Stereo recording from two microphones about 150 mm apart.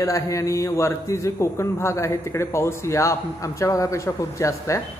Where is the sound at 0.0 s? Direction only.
20° left (ahead or behind).